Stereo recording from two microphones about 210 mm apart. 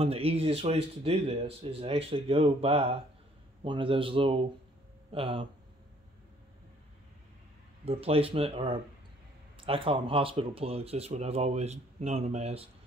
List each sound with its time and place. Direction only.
0.0 s speech: 30° right (ahead or behind)
7.8 s speech: 25° right (ahead or behind)